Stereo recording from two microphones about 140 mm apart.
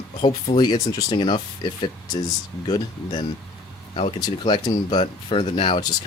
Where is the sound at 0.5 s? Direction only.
30° left (ahead or behind).